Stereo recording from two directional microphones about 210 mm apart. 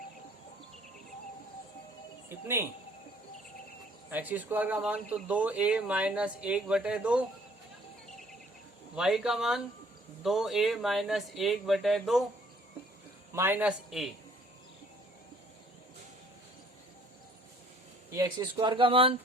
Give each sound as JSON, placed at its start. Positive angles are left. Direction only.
{"t": 2.3, "sound": "speech", "side_deg": -10}
{"t": 4.1, "sound": "speech", "side_deg": -10}
{"t": 9.0, "sound": "speech", "side_deg": 0}
{"t": 13.3, "sound": "speech", "side_deg": -10}
{"t": 18.1, "sound": "speech", "side_deg": -15}